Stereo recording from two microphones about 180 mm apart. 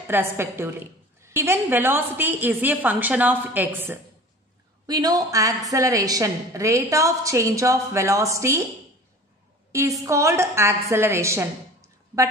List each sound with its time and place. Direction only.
0.1 s a woman's voice: 15° right (ahead or behind)
9.7 s a woman's voice: 15° right (ahead or behind)